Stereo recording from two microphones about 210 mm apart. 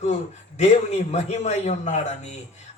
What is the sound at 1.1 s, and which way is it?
Speech, 30° left (ahead or behind).